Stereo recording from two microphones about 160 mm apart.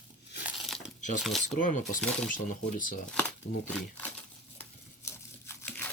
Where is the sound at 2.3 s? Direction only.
55° left (ahead or behind).